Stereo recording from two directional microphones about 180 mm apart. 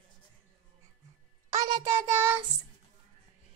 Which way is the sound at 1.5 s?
20° right (ahead or behind).